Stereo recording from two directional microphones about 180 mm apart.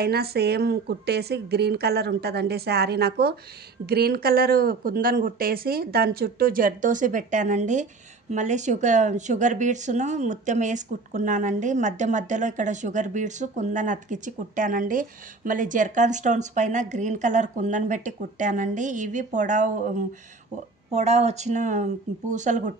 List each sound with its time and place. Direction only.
0.0 s speech: 60° right (ahead or behind); by 19.7 s 45° right (ahead or behind)
20.9 s speech: 35° right (ahead or behind)